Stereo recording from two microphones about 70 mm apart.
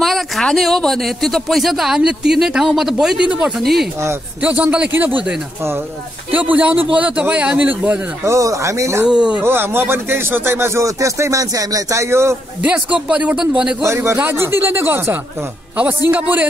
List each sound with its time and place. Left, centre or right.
0.0 s speech: centre
3.5 s speech: centre
4.4 s a man's voice: right
6.3 s a man's voice: right
8.2 s speech: right
9.0 s speech: centre
9.4 s speech: right
12.6 s a man's voice: centre
13.8 s a man's voice: right